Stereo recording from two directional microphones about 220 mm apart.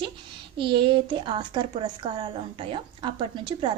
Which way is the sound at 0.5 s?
20° right (ahead or behind).